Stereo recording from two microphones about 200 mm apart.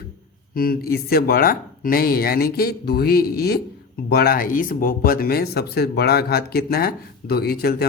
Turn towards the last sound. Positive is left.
turn(degrees=50)  # may be behind; listen again after turning